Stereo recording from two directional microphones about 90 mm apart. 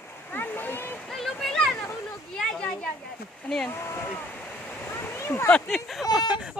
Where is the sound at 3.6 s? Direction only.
30° left (ahead or behind).